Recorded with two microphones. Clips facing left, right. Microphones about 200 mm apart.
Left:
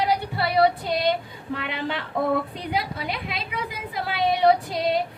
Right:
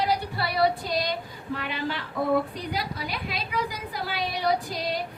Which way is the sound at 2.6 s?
25° left (ahead or behind).